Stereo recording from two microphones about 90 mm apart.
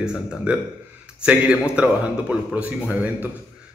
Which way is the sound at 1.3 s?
15° right (ahead or behind).